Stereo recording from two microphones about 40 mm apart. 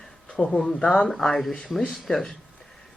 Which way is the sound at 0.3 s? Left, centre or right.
Centre.